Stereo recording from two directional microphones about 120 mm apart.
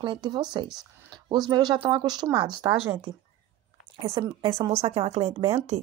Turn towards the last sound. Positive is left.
turn(degrees=-55)  # may be behind; listen again after turning